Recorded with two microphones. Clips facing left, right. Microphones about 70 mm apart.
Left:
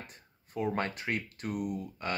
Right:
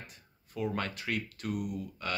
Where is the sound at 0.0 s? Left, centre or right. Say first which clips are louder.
Left 2 dB; left.